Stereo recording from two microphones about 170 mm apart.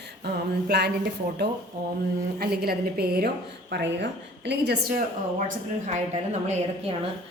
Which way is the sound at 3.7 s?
85° right.